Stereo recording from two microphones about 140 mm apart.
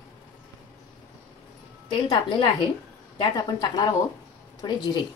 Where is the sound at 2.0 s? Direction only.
35° left (ahead or behind).